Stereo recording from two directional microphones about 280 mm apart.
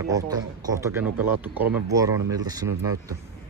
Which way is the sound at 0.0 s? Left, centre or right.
Centre.